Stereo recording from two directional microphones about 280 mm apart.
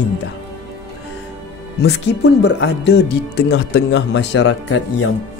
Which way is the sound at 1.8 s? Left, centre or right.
Left.